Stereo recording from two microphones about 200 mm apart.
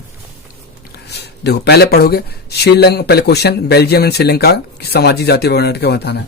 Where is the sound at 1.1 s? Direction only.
55° left (ahead or behind).